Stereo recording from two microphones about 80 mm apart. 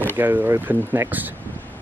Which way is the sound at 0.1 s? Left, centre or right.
Right.